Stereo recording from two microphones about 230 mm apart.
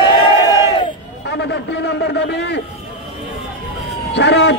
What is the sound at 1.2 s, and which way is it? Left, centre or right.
A man's voice, left.